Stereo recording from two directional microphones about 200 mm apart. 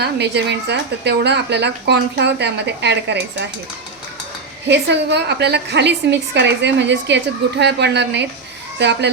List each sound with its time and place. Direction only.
0.0 s a woman's voice: 55° right (ahead or behind)
4.7 s a woman's voice: 60° right (ahead or behind)